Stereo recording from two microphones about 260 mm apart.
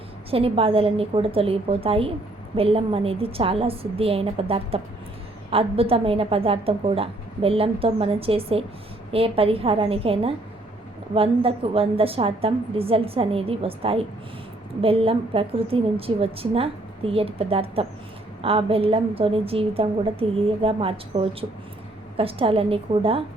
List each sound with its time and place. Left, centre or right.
0.3 s a woman's voice: right